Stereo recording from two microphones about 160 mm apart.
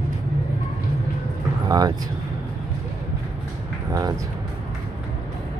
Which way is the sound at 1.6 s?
25° right (ahead or behind).